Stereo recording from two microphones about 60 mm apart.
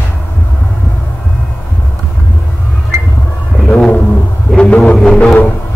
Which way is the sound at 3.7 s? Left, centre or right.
Left.